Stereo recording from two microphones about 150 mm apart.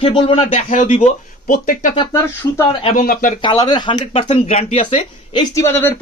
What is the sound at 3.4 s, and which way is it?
Speech, 30° left (ahead or behind).